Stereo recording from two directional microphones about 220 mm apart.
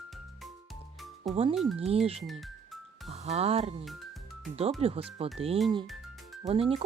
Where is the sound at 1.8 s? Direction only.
30° right (ahead or behind).